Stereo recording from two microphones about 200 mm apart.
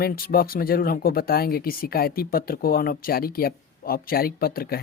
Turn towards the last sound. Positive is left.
turn(degrees=50)  # may be behind; listen again after turning